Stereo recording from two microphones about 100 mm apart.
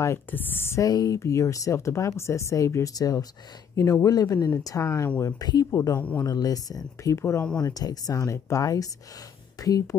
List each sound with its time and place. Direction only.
0.0 s a woman's voice: 20° left (ahead or behind)
0.8 s speech: 40° left (ahead or behind)
5.2 s speech: 40° left (ahead or behind)
5.7 s a woman's voice: 30° left (ahead or behind)
5.9 s a man's voice: 15° left (ahead or behind)
6.2 s a woman's voice: 40° left (ahead or behind)
7.6 s speech: 40° left (ahead or behind)